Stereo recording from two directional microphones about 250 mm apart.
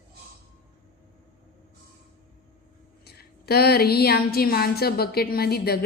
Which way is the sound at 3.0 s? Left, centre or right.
Left.